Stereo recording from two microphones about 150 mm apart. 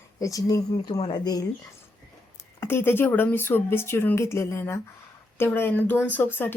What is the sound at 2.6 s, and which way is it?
Speech, 15° left (ahead or behind).